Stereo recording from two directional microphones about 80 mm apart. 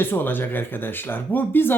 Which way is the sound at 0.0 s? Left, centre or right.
Left.